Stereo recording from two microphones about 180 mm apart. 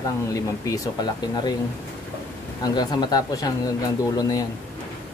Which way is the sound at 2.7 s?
25° left (ahead or behind).